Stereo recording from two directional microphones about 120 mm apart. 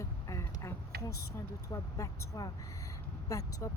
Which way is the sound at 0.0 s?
25° left (ahead or behind).